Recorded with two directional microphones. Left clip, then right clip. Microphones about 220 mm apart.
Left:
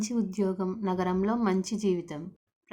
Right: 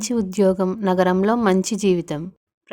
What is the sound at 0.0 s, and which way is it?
Speech, 40° right (ahead or behind).